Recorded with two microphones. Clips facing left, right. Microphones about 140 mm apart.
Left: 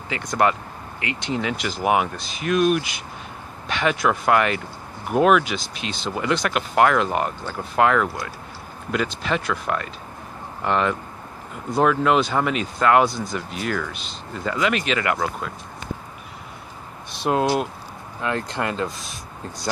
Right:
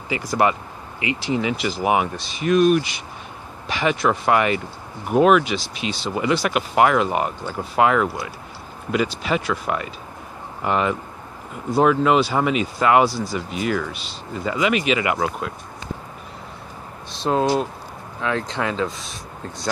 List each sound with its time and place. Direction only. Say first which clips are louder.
0.1 s speech: right 1 dB; 5° right (ahead or behind)
17.2 s speech: right 1 dB; 10° left (ahead or behind)